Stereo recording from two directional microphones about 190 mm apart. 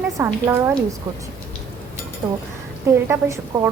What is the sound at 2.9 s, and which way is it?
Speech, 15° right (ahead or behind).